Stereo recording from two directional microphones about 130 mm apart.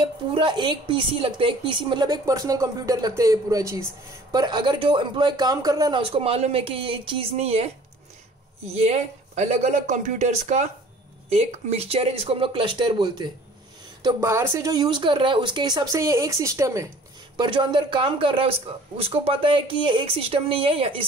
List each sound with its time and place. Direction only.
0.0 s speech: 40° right (ahead or behind)
8.7 s speech: 55° right (ahead or behind)
11.3 s speech: 55° right (ahead or behind); by 13.3 s 35° right (ahead or behind)
14.0 s speech: 20° right (ahead or behind)
17.4 s speech: 40° right (ahead or behind)